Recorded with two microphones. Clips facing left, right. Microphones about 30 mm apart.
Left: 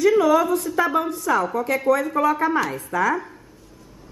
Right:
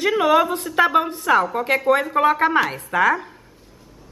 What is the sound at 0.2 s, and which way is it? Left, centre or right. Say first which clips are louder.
A woman's voice: right 1 dB; right.